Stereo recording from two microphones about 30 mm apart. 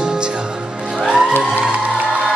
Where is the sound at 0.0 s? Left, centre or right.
Right.